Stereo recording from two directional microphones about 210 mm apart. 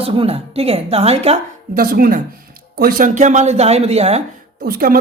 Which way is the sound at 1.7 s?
45° right (ahead or behind).